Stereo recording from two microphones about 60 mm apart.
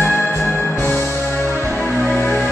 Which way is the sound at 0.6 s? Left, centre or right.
Left.